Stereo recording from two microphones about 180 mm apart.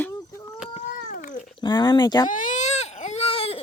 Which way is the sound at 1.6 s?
25° left (ahead or behind).